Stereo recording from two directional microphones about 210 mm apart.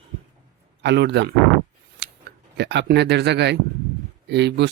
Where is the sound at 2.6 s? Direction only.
55° right (ahead or behind).